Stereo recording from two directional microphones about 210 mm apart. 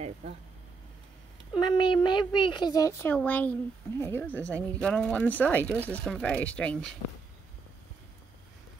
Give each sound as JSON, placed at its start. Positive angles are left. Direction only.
{"t": 1.5, "sound": "speech", "side_deg": 20}